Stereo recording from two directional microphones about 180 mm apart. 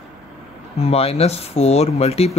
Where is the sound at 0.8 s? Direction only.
35° left (ahead or behind).